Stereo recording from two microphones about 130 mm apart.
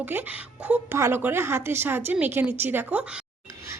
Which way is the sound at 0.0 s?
15° right (ahead or behind).